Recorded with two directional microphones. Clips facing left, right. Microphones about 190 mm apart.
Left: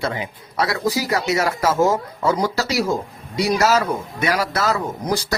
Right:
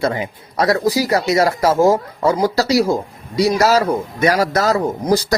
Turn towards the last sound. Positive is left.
turn(degrees=-40)  # may be behind; listen again after turning